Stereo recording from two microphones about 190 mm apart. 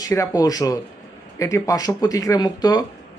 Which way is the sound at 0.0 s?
15° left (ahead or behind).